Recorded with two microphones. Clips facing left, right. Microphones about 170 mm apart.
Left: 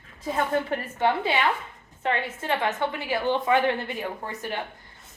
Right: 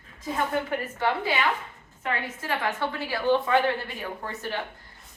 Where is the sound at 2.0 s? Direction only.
20° left (ahead or behind).